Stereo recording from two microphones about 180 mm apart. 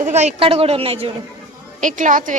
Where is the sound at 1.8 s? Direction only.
45° right (ahead or behind).